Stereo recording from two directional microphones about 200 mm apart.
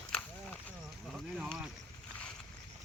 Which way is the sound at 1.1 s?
5° right (ahead or behind).